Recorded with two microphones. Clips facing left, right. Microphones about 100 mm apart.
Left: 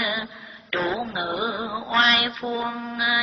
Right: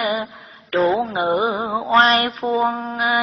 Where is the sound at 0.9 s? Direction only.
30° right (ahead or behind).